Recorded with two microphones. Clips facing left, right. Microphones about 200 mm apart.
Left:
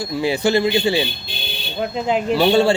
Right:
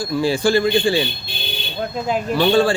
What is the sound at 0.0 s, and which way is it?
Speech, 20° left (ahead or behind).